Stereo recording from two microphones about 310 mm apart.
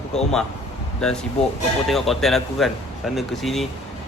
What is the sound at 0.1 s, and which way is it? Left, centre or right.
Speech, centre.